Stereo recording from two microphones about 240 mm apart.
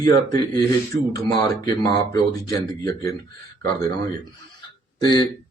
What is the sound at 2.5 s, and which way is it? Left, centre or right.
Speech, centre.